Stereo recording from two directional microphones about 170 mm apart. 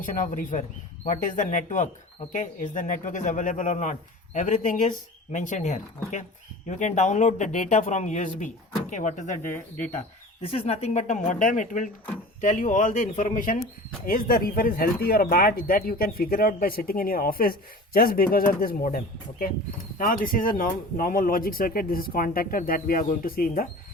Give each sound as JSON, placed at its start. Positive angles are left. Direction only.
{"t": 0.0, "sound": "speech", "side_deg": 50}
{"t": 10.4, "sound": "speech", "side_deg": 35}
{"t": 20.0, "sound": "speech", "side_deg": 55}